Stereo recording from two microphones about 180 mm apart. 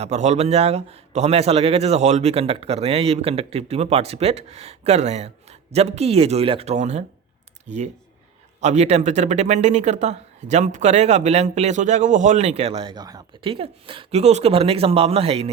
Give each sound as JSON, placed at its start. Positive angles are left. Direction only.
{"t": 0.0, "sound": "a man's voice", "side_deg": -40}